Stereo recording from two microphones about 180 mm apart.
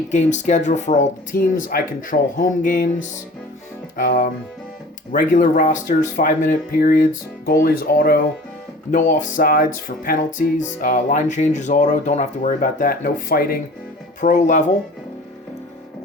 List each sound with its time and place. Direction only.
0.1 s music: 40° left (ahead or behind)
3.9 s music: 50° left (ahead or behind)
7.1 s speech: 55° left (ahead or behind)
8.9 s music: 45° left (ahead or behind)